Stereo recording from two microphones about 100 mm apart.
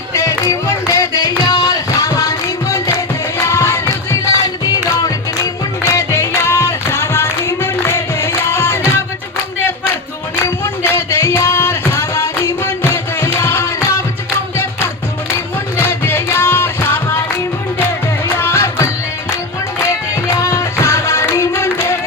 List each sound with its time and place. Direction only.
0.1 s music: 30° left (ahead or behind)
5.9 s music: 30° left (ahead or behind)
10.4 s music: 25° left (ahead or behind)
15.9 s music: 25° left (ahead or behind)
18.3 s music: 25° left (ahead or behind)
19.9 s music: 30° left (ahead or behind)